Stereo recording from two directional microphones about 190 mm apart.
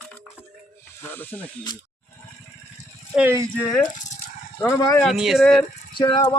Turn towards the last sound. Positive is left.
turn(degrees=25)  # may be behind; listen again after turning